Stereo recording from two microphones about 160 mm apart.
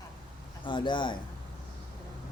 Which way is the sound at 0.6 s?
30° left (ahead or behind).